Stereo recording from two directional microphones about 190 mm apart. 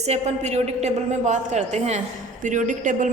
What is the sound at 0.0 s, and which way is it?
A woman's voice, 35° right (ahead or behind).